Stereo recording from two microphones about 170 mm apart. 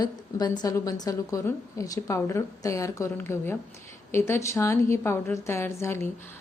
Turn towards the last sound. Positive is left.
turn(degrees=15)  # may be behind; listen again after turning